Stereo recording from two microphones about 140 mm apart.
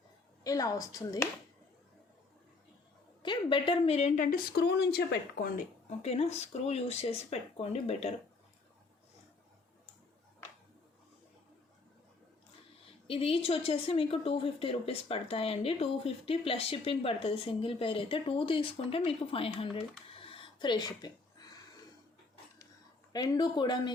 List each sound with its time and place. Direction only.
0.4 s a woman's voice: 25° left (ahead or behind)
3.2 s a woman's voice: 35° left (ahead or behind); by 4.4 s 70° left (ahead or behind)
5.4 s speech: 90° left
5.9 s a woman's voice: 50° left (ahead or behind)
13.1 s a woman's voice: 40° left (ahead or behind)
20.1 s a sound: 40° left (ahead or behind)
23.1 s speech: 30° left (ahead or behind)